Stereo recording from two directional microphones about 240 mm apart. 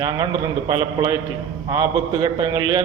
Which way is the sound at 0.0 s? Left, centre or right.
Centre.